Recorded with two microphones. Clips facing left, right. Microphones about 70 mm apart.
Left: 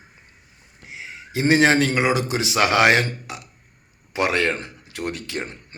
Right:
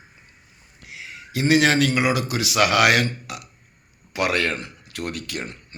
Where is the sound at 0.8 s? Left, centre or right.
Left.